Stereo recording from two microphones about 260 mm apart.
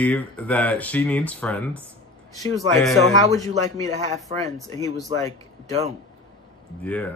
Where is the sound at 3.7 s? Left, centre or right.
Left.